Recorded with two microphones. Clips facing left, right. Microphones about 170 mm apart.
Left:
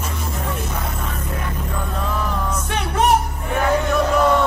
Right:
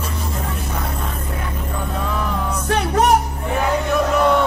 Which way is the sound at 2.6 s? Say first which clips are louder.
Right 9 dB; 40° right (ahead or behind).